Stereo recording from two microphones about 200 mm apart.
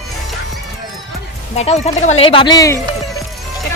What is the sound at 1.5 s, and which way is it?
Speech, 35° left (ahead or behind).